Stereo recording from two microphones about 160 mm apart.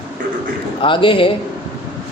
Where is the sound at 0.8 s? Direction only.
30° left (ahead or behind).